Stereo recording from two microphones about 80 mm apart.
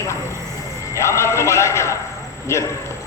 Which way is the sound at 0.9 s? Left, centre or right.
Left.